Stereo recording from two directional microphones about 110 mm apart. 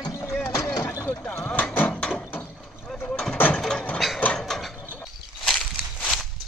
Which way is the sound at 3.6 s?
5° left (ahead or behind).